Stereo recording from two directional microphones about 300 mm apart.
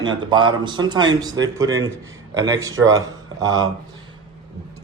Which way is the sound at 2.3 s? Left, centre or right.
Centre.